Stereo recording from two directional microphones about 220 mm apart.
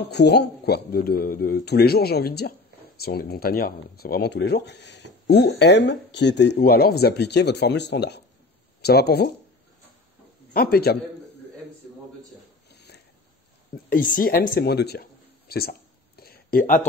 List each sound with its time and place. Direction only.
0.0 s speech: 50° left (ahead or behind)
10.5 s speech: 45° left (ahead or behind)
12.7 s filing: 50° left (ahead or behind)
13.8 s speech: 40° left (ahead or behind)
16.2 s a sound: 45° left (ahead or behind)